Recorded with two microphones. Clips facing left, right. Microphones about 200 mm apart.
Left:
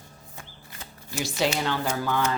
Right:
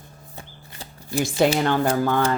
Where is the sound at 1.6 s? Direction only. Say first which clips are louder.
Right 7 dB; 55° right (ahead or behind).